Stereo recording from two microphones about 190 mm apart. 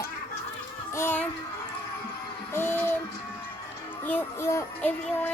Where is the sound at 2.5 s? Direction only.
10° left (ahead or behind).